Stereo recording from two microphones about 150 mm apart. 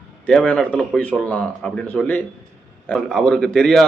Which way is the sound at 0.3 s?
5° left (ahead or behind).